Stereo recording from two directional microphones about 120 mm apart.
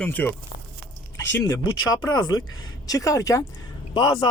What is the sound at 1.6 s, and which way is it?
A man's voice, 40° left (ahead or behind).